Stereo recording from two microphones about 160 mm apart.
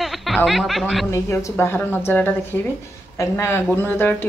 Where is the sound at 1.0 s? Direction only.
15° left (ahead or behind).